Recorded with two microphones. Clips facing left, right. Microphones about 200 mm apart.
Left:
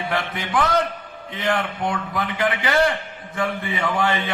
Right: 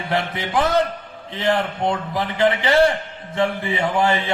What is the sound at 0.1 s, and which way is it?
Speech, 25° right (ahead or behind).